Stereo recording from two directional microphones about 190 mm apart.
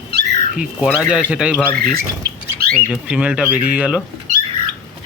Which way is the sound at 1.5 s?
5° left (ahead or behind).